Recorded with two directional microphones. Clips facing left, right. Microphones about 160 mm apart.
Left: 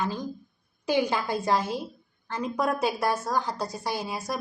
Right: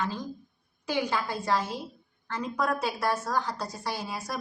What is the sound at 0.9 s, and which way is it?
A woman's voice, 15° left (ahead or behind).